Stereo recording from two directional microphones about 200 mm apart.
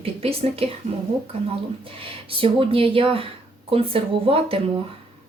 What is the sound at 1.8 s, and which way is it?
Speech, 25° right (ahead or behind).